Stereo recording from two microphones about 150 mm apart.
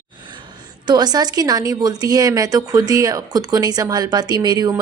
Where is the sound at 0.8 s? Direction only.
25° right (ahead or behind).